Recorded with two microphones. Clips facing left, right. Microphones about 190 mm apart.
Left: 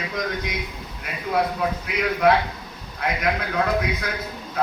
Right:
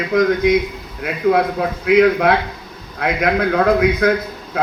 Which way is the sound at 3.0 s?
55° right (ahead or behind).